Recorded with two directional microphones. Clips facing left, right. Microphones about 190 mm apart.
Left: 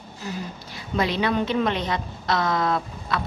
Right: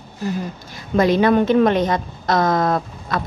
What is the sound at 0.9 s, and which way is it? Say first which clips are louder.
A woman's voice: right 8 dB; 45° right (ahead or behind).